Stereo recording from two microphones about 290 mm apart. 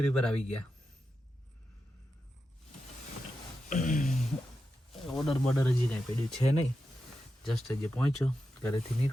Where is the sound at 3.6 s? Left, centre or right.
Left.